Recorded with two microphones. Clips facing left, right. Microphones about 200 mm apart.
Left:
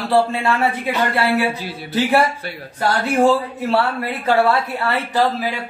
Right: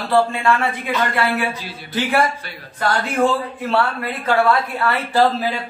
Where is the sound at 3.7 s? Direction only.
25° left (ahead or behind).